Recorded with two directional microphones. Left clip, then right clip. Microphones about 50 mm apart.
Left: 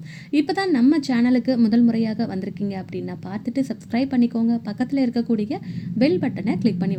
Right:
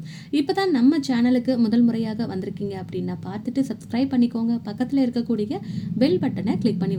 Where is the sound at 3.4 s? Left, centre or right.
Left.